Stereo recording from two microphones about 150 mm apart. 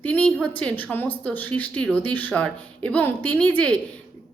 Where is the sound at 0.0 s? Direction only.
10° left (ahead or behind).